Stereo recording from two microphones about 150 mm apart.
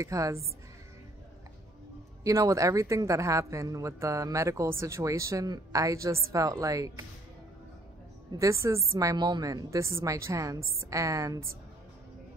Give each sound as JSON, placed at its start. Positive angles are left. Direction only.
{"t": 0.0, "sound": "speech", "side_deg": -20}
{"t": 2.2, "sound": "speech", "side_deg": -20}
{"t": 8.3, "sound": "speech", "side_deg": -20}